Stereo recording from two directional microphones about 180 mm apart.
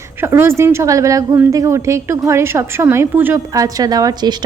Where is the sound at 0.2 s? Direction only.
15° right (ahead or behind).